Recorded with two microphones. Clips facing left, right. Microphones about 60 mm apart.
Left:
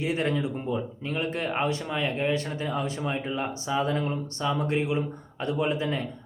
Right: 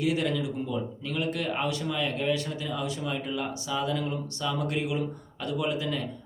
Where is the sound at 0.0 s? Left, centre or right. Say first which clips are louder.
Even; left.